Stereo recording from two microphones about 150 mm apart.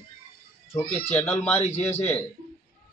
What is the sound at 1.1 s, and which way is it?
Speech, 15° left (ahead or behind).